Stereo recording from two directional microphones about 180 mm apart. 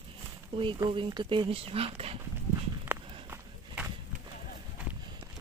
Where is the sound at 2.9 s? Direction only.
10° right (ahead or behind).